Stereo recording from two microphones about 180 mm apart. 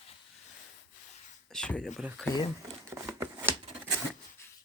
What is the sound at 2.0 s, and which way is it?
Speech, 5° right (ahead or behind).